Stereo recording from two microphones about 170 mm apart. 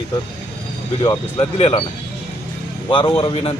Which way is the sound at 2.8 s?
30° left (ahead or behind).